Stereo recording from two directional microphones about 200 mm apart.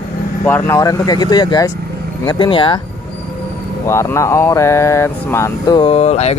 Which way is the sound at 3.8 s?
15° left (ahead or behind).